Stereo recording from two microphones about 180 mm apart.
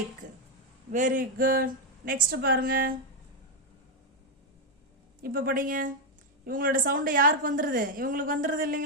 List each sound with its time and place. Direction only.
0.2 s a sound: 45° right (ahead or behind)
0.9 s a woman's voice: 45° right (ahead or behind)
5.2 s a woman's voice: 55° right (ahead or behind)